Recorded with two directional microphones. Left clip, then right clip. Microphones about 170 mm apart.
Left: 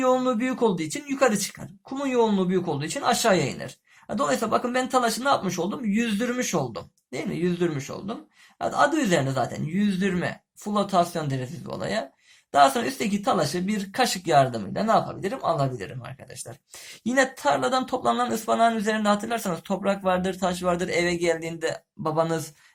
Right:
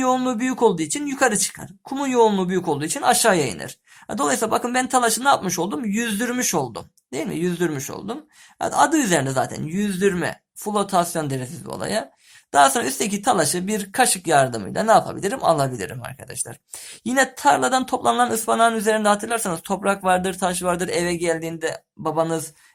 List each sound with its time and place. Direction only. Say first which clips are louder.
0.0 s speech: right 1 dB; 35° right (ahead or behind)
17.0 s speech: right 4 dB; 35° right (ahead or behind)